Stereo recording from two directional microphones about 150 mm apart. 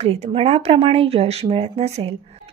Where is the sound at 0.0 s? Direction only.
40° right (ahead or behind).